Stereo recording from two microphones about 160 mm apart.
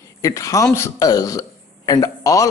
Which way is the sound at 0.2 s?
20° left (ahead or behind).